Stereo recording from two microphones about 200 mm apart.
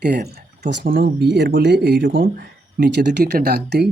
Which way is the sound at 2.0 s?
45° right (ahead or behind).